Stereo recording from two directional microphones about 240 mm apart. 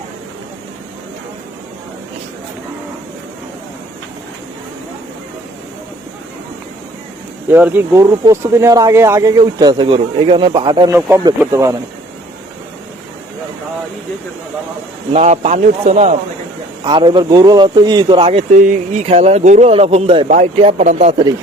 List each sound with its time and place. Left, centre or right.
7.5 s speech: centre
15.1 s speech: right